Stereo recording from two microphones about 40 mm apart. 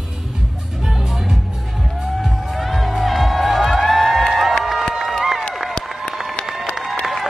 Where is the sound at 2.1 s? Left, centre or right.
Centre.